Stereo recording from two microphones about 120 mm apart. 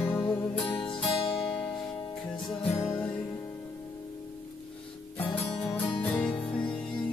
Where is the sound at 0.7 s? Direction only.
45° left (ahead or behind).